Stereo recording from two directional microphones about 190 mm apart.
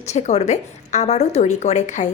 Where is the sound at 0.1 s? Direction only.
35° left (ahead or behind).